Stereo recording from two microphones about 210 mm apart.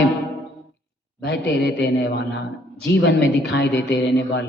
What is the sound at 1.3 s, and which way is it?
Speech, 55° left (ahead or behind).